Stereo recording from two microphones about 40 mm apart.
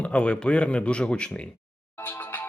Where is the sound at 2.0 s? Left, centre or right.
Left.